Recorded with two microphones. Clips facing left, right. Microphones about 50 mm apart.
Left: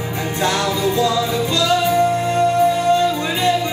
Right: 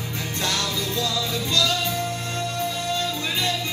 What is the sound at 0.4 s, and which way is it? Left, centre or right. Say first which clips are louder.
Music: left 8 dB; centre.